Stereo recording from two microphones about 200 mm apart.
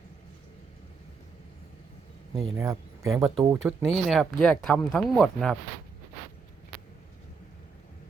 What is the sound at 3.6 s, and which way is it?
Speech, centre (ahead or behind).